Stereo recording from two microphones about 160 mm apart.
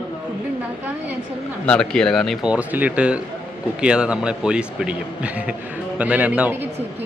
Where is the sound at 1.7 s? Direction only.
5° left (ahead or behind).